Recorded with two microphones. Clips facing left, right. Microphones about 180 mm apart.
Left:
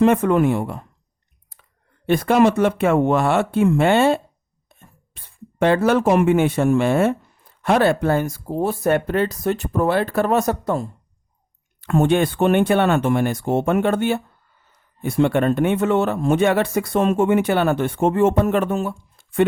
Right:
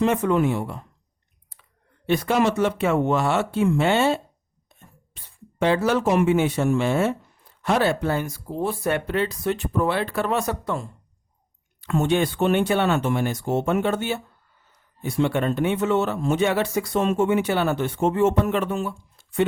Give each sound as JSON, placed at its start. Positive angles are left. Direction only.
{"t": 0.0, "sound": "speech", "side_deg": 55}
{"t": 2.0, "sound": "speech", "side_deg": 50}